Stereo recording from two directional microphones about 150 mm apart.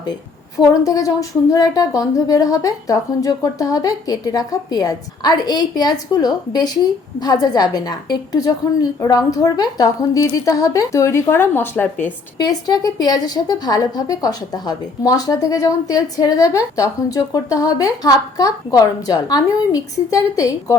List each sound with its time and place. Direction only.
0.0 s a woman's voice: 25° left (ahead or behind)
12.4 s a woman's voice: 25° left (ahead or behind)